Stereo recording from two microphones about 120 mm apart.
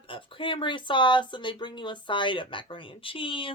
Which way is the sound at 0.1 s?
45° left (ahead or behind).